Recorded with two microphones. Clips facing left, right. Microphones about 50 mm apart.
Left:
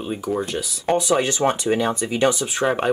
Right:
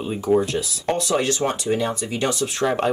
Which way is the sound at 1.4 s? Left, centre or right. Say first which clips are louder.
Left 2 dB; left.